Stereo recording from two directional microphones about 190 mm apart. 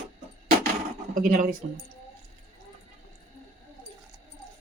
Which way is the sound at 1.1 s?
40° right (ahead or behind).